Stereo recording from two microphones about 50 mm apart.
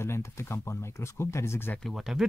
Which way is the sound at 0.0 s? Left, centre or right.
Left.